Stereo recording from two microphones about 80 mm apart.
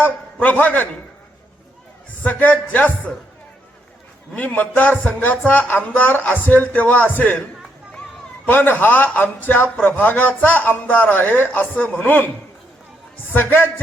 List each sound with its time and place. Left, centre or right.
0.6 s speech: left
2.2 s speech: centre
4.4 s speech: centre
8.4 s speech: left
13.3 s speech: left